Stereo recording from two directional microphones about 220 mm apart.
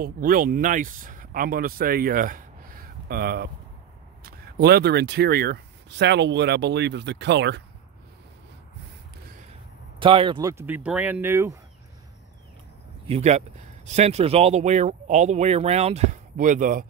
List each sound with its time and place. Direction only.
0.0 s speech: 40° right (ahead or behind)
9.9 s speech: 25° right (ahead or behind)
13.0 s speech: 30° right (ahead or behind)